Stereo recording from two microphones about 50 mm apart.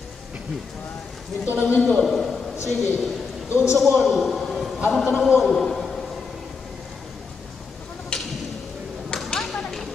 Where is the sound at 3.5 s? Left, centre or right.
Left.